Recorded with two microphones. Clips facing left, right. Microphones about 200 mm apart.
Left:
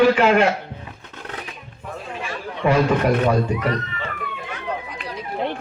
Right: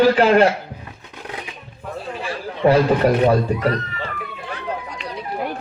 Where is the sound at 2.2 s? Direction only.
35° right (ahead or behind).